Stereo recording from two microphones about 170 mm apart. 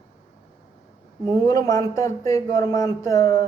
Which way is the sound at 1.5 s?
20° left (ahead or behind).